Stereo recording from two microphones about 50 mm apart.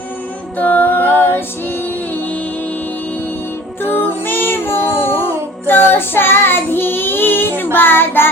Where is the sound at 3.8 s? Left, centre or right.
Left.